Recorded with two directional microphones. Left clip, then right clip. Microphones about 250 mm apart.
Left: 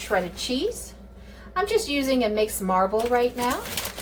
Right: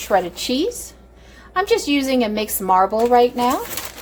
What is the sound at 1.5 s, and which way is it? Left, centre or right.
A woman's voice, right.